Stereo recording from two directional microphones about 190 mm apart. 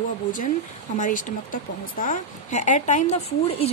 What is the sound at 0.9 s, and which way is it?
A woman's voice, 45° left (ahead or behind).